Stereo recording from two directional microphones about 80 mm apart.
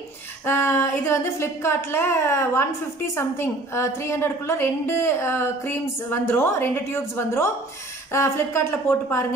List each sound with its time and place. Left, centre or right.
0.5 s a woman's voice: left